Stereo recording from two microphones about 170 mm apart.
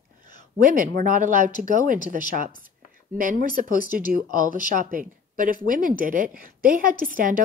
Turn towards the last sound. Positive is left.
turn(degrees=-55)  # may be behind; listen again after turning